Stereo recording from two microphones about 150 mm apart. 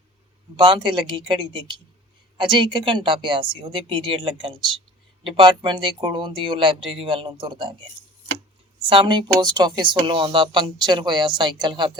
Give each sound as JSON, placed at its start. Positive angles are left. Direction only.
{"t": 0.5, "sound": "speech", "side_deg": -30}
{"t": 8.9, "sound": "speech", "side_deg": -30}